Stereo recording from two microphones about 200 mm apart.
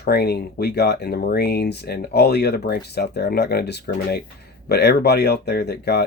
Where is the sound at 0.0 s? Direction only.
55° left (ahead or behind).